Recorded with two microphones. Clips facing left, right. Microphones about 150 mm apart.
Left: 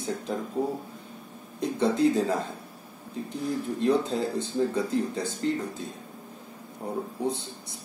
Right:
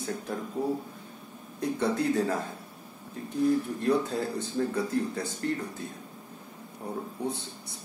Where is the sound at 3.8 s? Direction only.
20° left (ahead or behind).